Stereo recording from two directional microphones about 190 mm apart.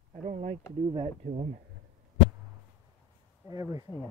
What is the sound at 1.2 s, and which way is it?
Speech, 35° right (ahead or behind).